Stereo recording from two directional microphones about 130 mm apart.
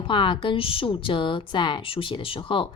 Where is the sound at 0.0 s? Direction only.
40° left (ahead or behind).